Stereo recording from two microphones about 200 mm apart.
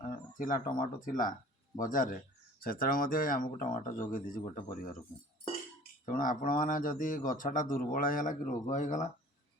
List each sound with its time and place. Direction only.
0.3 s speech: 45° left (ahead or behind)
6.1 s speech: 40° left (ahead or behind)